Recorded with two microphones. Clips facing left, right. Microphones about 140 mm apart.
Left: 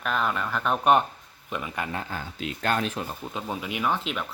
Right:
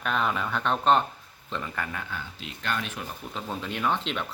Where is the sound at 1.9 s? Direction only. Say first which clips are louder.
Left 3 dB; 40° left (ahead or behind).